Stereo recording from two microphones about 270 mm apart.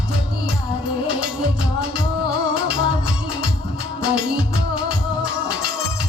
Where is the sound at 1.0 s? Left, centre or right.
Centre.